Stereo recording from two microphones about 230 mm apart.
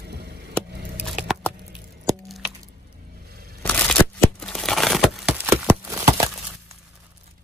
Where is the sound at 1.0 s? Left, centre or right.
Centre.